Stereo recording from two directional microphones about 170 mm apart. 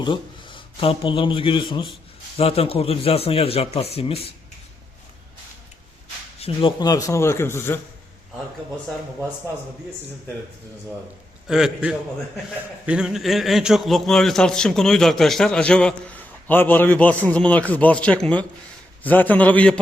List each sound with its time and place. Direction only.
0.0 s a man's voice: 30° left (ahead or behind)
6.4 s speech: 30° left (ahead or behind); by 7.8 s 15° left (ahead or behind)
11.4 s a man's voice: 5° right (ahead or behind)